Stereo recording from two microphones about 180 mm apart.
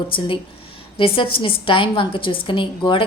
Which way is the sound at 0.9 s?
30° left (ahead or behind).